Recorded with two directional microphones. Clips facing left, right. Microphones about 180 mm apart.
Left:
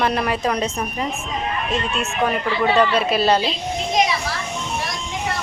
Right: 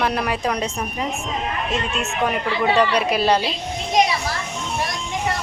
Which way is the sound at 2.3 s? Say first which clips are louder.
Even; 10° right (ahead or behind).